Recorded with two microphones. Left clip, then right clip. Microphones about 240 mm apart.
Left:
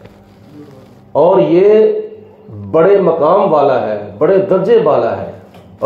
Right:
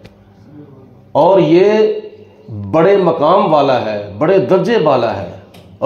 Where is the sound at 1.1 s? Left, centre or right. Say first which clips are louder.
Even; right.